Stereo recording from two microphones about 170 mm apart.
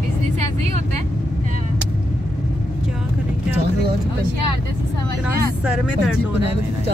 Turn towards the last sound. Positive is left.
turn(degrees=-5)  # may be behind; listen again after turning